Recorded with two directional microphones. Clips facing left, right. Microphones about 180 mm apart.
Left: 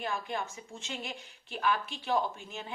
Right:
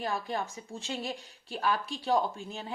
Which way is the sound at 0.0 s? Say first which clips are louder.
Right 2 dB; 35° right (ahead or behind).